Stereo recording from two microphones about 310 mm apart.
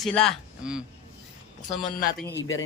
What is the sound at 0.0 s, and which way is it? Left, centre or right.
Speech, centre.